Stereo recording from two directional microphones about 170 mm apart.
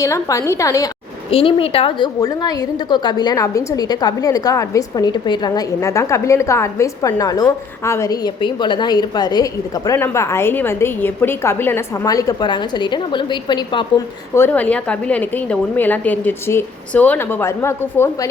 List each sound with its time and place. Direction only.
0.0 s a woman's voice: 20° left (ahead or behind)
1.3 s a woman's voice: 35° left (ahead or behind)
2.2 s a woman's voice: 20° left (ahead or behind)
14.3 s a woman's voice: 10° left (ahead or behind)